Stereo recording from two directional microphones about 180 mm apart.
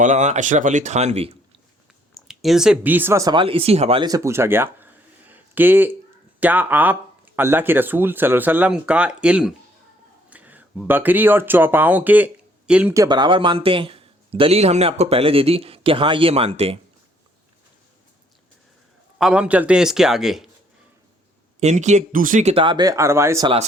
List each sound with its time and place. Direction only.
0.0 s speech: 40° right (ahead or behind)
2.1 s speech: centre (ahead or behind); by 4.1 s 30° right (ahead or behind)
4.1 s a sound: 15° right (ahead or behind)
6.4 s speech: 10° right (ahead or behind)
12.9 s speech: 20° right (ahead or behind)
19.2 s a man's voice: 5° right (ahead or behind)
21.6 s speech: 40° right (ahead or behind); by 23.5 s 15° right (ahead or behind)